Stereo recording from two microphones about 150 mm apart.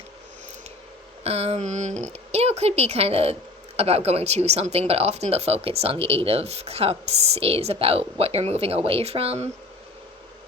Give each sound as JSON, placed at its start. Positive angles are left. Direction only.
{"t": 1.2, "sound": "speech", "side_deg": -45}